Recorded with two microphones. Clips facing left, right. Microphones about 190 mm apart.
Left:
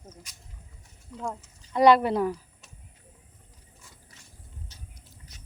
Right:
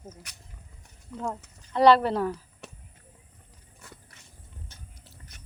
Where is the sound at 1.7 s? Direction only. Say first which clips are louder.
Even; 10° left (ahead or behind).